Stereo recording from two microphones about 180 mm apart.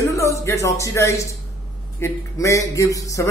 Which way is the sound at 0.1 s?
15° left (ahead or behind).